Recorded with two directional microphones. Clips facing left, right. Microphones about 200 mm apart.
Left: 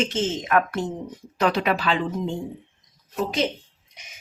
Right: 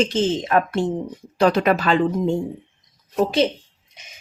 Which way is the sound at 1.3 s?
40° right (ahead or behind).